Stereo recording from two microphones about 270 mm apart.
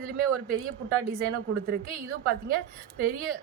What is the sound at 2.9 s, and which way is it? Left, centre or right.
Speech, right.